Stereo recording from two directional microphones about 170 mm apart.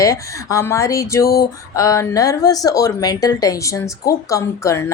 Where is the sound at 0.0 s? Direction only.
20° left (ahead or behind).